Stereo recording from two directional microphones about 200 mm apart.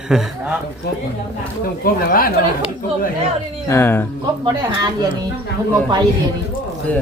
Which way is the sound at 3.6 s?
10° left (ahead or behind).